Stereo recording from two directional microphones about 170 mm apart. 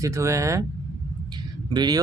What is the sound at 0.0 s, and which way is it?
Speech, 15° right (ahead or behind).